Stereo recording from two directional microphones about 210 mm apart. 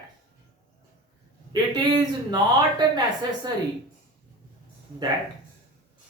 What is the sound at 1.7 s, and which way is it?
Speech, 20° right (ahead or behind).